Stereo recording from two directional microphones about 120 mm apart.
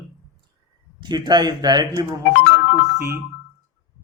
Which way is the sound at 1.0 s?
35° right (ahead or behind).